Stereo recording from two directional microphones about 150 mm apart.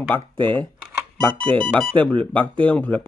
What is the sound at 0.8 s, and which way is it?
Music, 5° left (ahead or behind).